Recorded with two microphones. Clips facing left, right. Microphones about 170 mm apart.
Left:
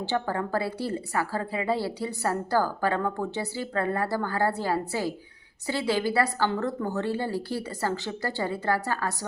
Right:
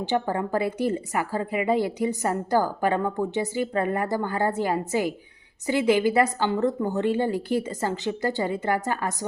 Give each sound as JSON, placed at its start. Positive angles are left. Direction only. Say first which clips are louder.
{"t": 0.0, "sound": "a woman's voice", "louder": "right 3 dB", "side_deg": -20}